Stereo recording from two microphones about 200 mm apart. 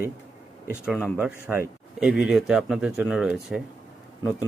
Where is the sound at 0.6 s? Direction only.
5° right (ahead or behind).